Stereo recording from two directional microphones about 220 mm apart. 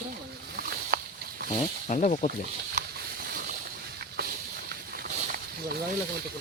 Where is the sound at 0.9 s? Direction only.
45° right (ahead or behind).